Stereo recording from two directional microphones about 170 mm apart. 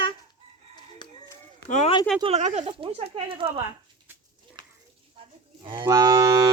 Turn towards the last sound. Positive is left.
turn(degrees=-20)  # may be behind; listen again after turning